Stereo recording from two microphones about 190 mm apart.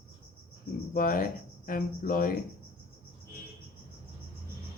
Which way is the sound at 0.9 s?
45° left (ahead or behind).